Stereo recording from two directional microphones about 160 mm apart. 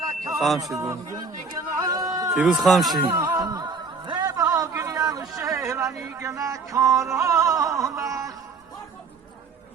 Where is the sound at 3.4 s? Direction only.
25° right (ahead or behind).